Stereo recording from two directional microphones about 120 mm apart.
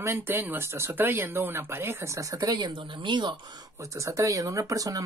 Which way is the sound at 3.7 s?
25° right (ahead or behind).